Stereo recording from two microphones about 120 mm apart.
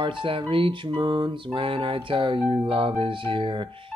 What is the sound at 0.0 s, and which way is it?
Music, 45° right (ahead or behind).